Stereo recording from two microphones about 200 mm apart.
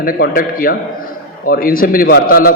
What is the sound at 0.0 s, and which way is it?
A man's voice, 45° left (ahead or behind).